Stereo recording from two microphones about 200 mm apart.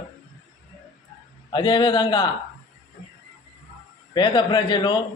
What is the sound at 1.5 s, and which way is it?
Speech, 25° left (ahead or behind).